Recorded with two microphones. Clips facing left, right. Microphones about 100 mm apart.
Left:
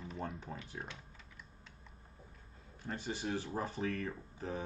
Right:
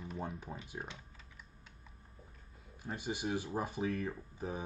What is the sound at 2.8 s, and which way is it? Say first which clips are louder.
Speech: right 1 dB; 15° right (ahead or behind).